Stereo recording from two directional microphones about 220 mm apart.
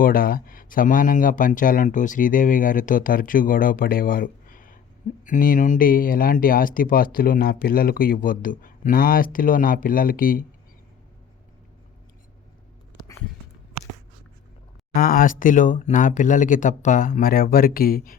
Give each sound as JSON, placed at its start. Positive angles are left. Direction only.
{"t": 0.0, "sound": "speech", "side_deg": 40}
{"t": 14.9, "sound": "speech", "side_deg": 40}